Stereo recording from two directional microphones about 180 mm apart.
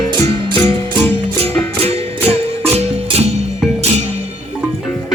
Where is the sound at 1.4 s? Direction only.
35° right (ahead or behind).